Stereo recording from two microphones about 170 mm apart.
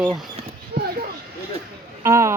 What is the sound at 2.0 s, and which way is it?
Speech, 15° right (ahead or behind).